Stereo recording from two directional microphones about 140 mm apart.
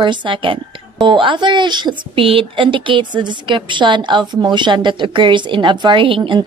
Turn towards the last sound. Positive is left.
turn(degrees=-35)  # may be behind; listen again after turning